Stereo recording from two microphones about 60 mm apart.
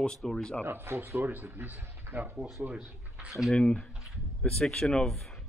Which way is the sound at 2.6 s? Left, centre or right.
Centre.